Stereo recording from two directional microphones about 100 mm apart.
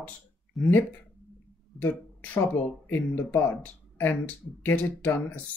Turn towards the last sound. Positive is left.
turn(degrees=20)  # may be behind; listen again after turning